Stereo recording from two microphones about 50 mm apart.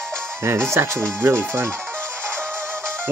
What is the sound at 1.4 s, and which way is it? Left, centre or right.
Speech, right.